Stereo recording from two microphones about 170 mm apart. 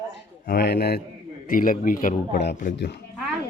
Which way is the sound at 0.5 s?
70° left (ahead or behind).